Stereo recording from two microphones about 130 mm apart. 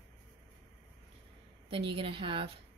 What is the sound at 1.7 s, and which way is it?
Speech, 40° right (ahead or behind).